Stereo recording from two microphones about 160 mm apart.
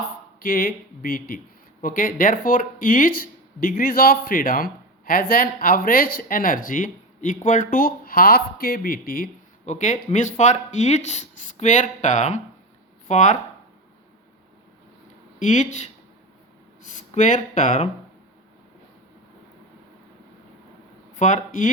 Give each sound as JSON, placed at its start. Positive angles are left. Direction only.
{"t": 0.3, "sound": "speech", "side_deg": 65}
{"t": 9.6, "sound": "speech", "side_deg": 50}
{"t": 15.4, "sound": "speech", "side_deg": 50}
{"t": 21.2, "sound": "speech", "side_deg": 50}